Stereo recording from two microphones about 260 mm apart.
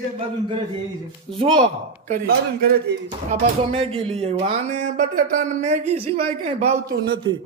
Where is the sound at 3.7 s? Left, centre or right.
Right.